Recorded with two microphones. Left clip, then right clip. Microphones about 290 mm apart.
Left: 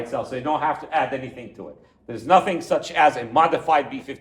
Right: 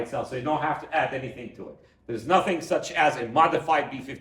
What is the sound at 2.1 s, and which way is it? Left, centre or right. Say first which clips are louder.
Speech: left 5 dB; left.